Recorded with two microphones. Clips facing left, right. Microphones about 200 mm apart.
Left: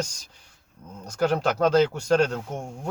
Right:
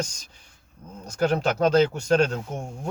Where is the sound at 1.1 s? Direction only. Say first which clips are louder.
Even; 15° right (ahead or behind).